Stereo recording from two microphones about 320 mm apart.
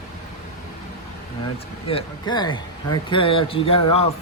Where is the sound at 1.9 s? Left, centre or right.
Centre.